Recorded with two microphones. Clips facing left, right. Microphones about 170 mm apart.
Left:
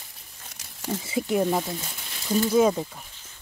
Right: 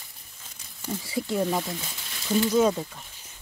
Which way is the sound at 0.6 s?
90° left.